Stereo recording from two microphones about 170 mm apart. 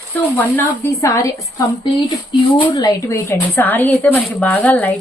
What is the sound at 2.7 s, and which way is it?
A woman's voice, 25° left (ahead or behind).